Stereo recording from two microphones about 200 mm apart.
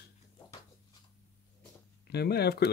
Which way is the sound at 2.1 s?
55° left (ahead or behind).